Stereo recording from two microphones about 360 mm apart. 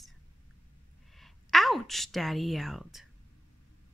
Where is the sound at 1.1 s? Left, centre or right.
Centre.